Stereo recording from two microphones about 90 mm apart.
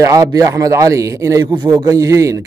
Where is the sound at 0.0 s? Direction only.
40° right (ahead or behind).